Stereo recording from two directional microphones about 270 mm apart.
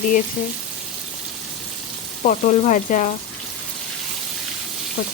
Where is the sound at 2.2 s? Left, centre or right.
Left.